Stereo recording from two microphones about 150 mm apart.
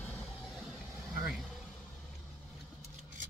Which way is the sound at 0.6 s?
Centre (ahead or behind).